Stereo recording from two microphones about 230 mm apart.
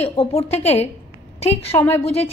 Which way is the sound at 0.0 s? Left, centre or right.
Left.